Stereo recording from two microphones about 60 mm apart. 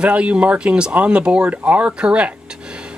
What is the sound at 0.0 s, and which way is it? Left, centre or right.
Speech, centre.